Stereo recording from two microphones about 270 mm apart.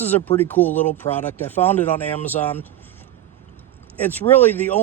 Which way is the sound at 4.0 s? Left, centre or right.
Centre.